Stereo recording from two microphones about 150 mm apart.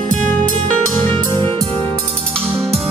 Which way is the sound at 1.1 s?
35° right (ahead or behind).